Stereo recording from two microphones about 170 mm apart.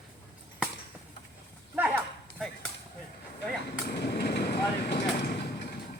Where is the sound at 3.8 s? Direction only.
75° left (ahead or behind).